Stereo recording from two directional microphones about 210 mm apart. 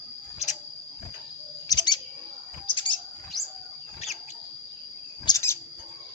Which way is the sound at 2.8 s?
20° left (ahead or behind).